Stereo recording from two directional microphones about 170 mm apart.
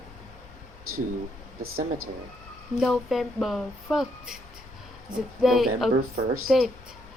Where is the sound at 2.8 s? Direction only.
Centre (ahead or behind).